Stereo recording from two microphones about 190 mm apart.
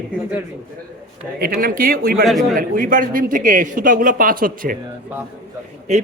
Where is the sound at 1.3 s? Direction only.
50° right (ahead or behind).